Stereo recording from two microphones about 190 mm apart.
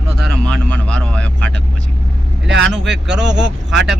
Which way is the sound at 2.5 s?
65° right (ahead or behind).